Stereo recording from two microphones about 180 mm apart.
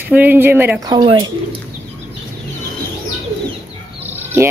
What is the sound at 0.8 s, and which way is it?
Speech, 25° right (ahead or behind).